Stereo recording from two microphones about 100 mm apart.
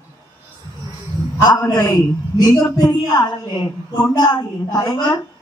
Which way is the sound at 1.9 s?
40° left (ahead or behind).